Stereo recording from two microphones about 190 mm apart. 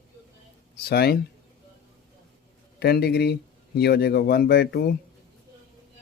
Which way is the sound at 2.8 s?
55° left (ahead or behind).